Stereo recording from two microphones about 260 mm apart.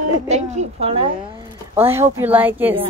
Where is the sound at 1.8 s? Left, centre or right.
Centre.